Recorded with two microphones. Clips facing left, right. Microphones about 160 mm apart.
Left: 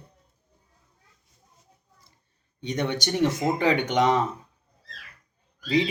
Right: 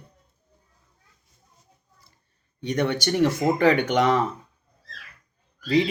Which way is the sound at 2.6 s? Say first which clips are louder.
Right 3 dB; 20° left (ahead or behind).